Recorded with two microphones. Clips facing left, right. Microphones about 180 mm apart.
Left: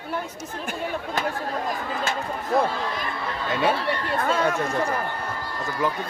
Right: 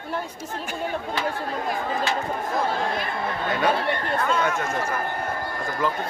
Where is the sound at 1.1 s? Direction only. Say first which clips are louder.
Even; 40° left (ahead or behind).